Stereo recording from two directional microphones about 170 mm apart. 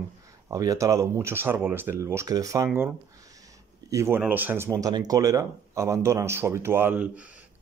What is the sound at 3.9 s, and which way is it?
Speech, 15° right (ahead or behind).